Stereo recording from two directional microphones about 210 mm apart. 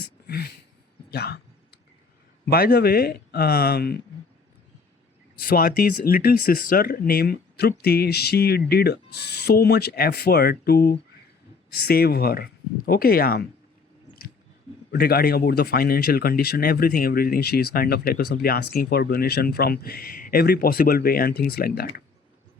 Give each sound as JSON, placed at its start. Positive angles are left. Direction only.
{"t": 0.3, "sound": "a sound", "side_deg": 50}
{"t": 1.1, "sound": "speech", "side_deg": 50}
{"t": 2.5, "sound": "speech", "side_deg": 50}
{"t": 5.4, "sound": "speech", "side_deg": 45}
{"t": 14.9, "sound": "speech", "side_deg": 45}